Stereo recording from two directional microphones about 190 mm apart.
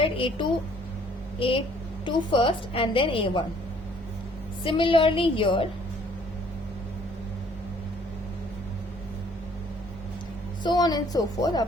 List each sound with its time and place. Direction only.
0.0 s a woman's voice: 25° left (ahead or behind)
4.6 s a woman's voice: 25° left (ahead or behind)
10.6 s a woman's voice: 20° left (ahead or behind)